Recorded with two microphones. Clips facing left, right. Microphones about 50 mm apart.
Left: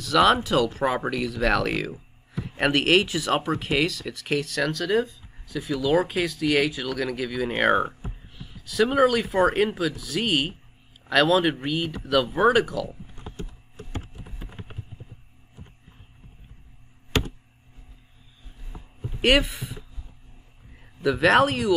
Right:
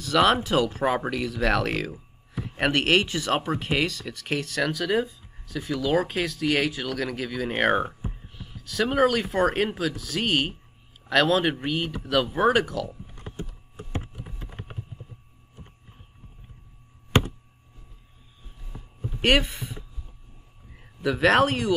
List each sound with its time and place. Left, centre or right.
0.0 s speech: centre
13.4 s computer keyboard: right
19.2 s speech: centre
21.0 s speech: centre